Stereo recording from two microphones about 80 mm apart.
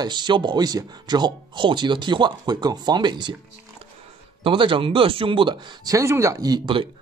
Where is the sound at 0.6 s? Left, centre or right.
Right.